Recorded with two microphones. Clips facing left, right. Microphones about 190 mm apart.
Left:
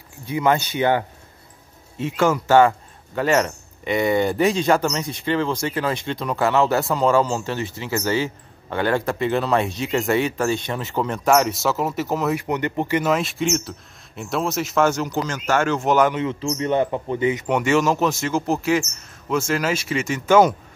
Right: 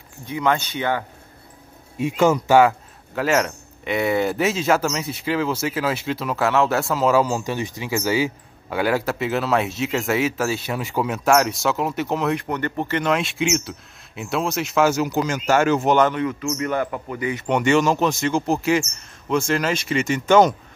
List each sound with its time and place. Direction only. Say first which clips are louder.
0.2 s speech: left 2 dB; 10° left (ahead or behind)
2.0 s speech: right 2 dB; 15° right (ahead or behind)
3.2 s speech: left 1 dB; centre (ahead or behind)
12.4 s speech: left 2 dB; 15° left (ahead or behind); by 16.0 s 5° right (ahead or behind)
16.2 s speech: even; 25° left (ahead or behind)
17.5 s speech: right 3 dB; centre (ahead or behind)